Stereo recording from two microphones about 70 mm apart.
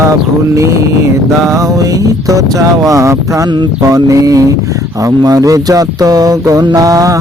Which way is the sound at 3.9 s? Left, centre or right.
Right.